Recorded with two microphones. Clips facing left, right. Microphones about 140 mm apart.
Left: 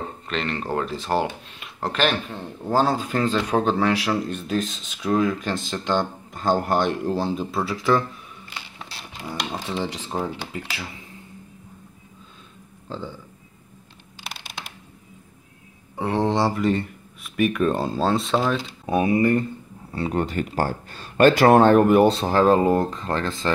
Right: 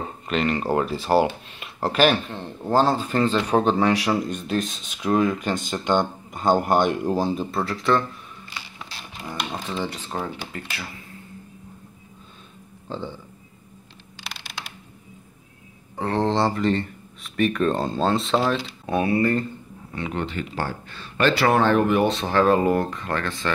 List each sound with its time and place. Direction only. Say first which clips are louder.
0.3 s speech: right 5 dB; 5° right (ahead or behind)
2.2 s speech: right 1 dB; 5° left (ahead or behind)
3.3 s speech: right 1 dB; 10° right (ahead or behind)
4.3 s speech: even; 5° left (ahead or behind)
4.7 s speech: right 2 dB; 5° right (ahead or behind)
9.2 s speech: left 1 dB; 5° left (ahead or behind)
12.8 s speech: right 1 dB; 15° right (ahead or behind)
16.0 s speech: even; 10° left (ahead or behind)
18.9 s speech: left 2 dB; 15° left (ahead or behind)
19.9 s speech: left 4 dB; 35° left (ahead or behind)